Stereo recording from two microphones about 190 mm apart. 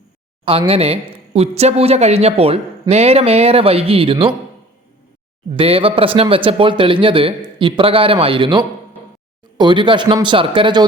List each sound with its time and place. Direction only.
0.7 s speech: 30° right (ahead or behind)
5.5 s speech: 30° right (ahead or behind)